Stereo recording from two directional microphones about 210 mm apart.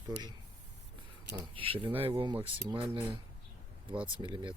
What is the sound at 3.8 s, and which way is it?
Speech, 25° right (ahead or behind).